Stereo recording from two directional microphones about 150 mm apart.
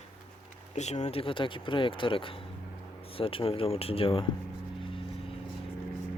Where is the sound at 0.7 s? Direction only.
50° left (ahead or behind).